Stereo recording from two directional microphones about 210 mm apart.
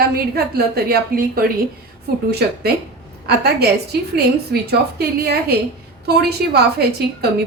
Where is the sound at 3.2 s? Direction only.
50° right (ahead or behind).